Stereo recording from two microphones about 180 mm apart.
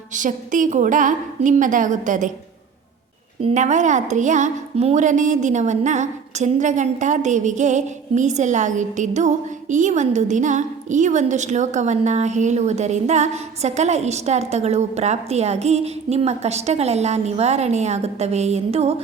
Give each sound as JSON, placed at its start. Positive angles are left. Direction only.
{"t": 0.1, "sound": "a woman's voice", "side_deg": -45}
{"t": 3.4, "sound": "a woman's voice", "side_deg": -40}